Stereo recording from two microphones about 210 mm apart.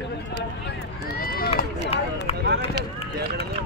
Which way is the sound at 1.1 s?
45° left (ahead or behind).